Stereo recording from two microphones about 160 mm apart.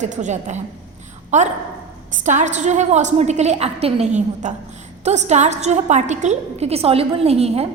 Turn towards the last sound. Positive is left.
turn(degrees=-40)  # may be behind; listen again after turning